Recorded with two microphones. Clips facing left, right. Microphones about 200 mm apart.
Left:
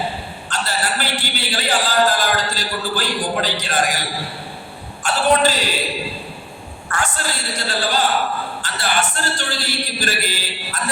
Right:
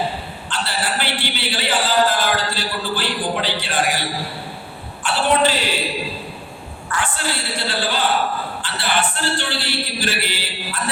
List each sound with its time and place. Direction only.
0.5 s a man's voice: 45° left (ahead or behind)
5.0 s a man's voice: 40° left (ahead or behind)
6.9 s a man's voice: 40° left (ahead or behind)